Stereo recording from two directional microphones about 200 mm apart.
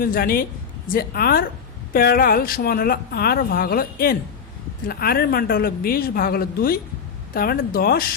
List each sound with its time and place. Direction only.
0.0 s speech: 45° left (ahead or behind)